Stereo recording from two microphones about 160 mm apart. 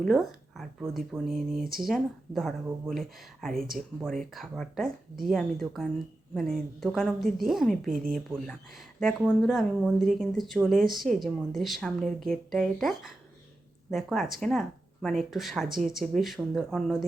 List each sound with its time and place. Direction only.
0.0 s speech: centre (ahead or behind)
7.9 s speech: 60° right (ahead or behind)
8.4 s speech: centre (ahead or behind)